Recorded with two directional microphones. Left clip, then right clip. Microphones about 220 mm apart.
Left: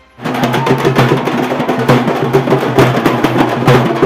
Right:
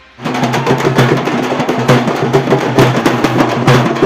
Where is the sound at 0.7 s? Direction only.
10° right (ahead or behind).